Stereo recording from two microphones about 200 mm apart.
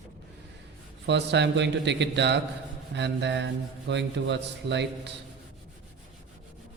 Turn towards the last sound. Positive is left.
turn(degrees=-60)  # may be behind; listen again after turning